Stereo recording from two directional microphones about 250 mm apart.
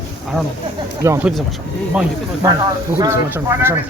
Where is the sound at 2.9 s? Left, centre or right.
Centre.